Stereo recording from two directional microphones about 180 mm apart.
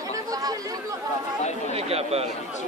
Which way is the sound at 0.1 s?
20° right (ahead or behind).